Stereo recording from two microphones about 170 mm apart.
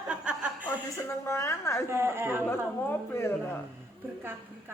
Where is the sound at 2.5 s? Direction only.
10° left (ahead or behind).